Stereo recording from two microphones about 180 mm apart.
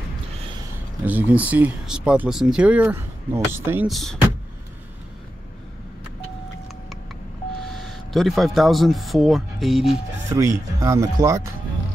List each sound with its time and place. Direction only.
1.0 s speech: 10° right (ahead or behind)
3.8 s speech: centre (ahead or behind)
7.7 s speech: centre (ahead or behind)
10.3 s speech: 15° right (ahead or behind)